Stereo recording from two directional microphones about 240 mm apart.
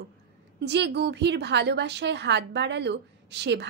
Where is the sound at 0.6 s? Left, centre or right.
Right.